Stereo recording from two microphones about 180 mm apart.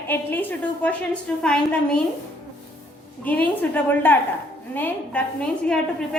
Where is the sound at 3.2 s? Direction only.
10° left (ahead or behind).